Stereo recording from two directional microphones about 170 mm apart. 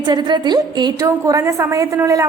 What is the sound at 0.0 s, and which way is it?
A woman's voice, 25° right (ahead or behind).